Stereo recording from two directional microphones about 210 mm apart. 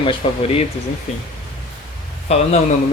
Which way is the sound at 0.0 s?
25° left (ahead or behind).